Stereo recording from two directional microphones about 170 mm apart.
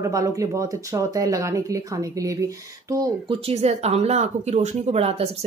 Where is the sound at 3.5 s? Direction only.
40° right (ahead or behind).